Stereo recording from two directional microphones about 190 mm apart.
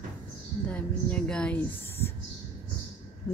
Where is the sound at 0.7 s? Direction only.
5° left (ahead or behind).